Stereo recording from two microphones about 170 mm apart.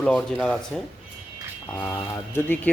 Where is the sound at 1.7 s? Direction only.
15° left (ahead or behind).